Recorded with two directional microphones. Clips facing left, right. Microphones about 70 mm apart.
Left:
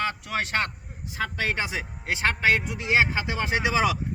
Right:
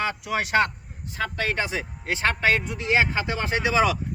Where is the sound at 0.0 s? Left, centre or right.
Centre.